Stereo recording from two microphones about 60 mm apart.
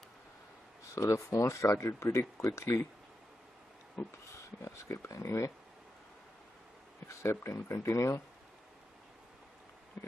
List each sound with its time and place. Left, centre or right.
0.8 s speech: left
4.6 s speech: left
5.1 s speech: left
7.1 s speech: left